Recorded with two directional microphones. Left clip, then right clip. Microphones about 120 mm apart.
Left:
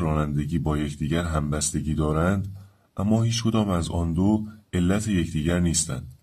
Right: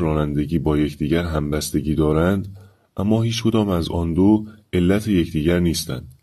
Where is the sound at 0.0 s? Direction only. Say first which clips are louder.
Right 6 dB; 30° right (ahead or behind).